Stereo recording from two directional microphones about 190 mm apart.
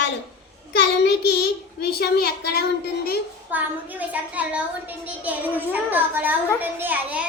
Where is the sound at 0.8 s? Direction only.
65° left (ahead or behind).